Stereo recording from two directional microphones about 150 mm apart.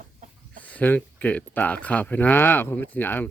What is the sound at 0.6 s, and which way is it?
Speech, 10° left (ahead or behind).